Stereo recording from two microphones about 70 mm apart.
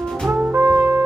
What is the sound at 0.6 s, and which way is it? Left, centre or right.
Music, right.